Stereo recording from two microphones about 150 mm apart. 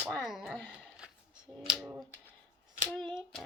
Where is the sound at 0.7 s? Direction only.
5° right (ahead or behind).